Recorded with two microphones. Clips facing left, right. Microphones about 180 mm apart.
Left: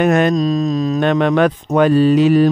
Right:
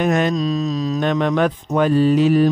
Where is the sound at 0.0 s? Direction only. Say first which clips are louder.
Left 4 dB; 60° left (ahead or behind).